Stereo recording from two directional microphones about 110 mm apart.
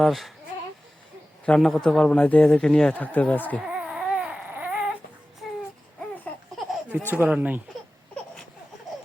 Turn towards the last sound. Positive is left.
turn(degrees=-15)  # may be behind; listen again after turning